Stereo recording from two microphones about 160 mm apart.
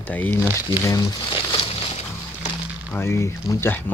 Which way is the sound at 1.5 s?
35° left (ahead or behind).